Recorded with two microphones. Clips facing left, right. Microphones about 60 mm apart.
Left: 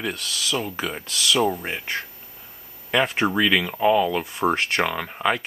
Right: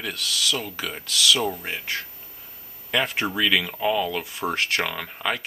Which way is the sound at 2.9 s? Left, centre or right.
Centre.